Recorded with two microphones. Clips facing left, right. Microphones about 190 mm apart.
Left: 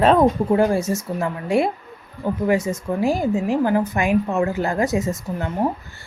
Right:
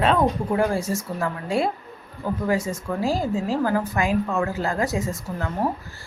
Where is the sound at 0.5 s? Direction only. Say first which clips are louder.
Left 4 dB; 25° left (ahead or behind).